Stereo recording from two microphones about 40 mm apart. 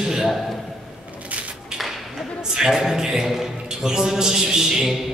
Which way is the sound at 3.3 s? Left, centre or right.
Centre.